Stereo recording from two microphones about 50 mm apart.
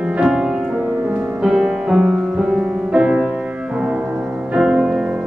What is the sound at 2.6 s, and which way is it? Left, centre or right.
Music, right.